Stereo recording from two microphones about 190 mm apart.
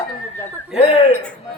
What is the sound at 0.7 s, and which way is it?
Speech, 30° left (ahead or behind).